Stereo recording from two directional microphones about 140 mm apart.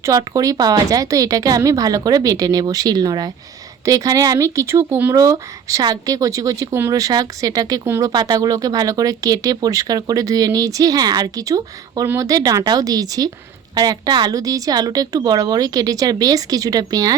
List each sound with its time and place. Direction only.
0.0 s speech: 25° right (ahead or behind)